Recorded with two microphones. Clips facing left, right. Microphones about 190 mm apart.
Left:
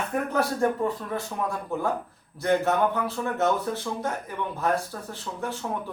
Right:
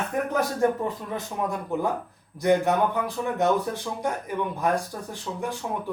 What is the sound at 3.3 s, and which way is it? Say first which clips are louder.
Speech: right 2 dB; 15° right (ahead or behind).